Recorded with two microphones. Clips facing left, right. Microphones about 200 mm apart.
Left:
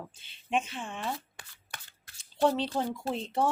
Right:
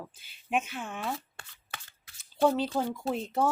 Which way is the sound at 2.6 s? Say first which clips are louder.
Right 1 dB; centre (ahead or behind).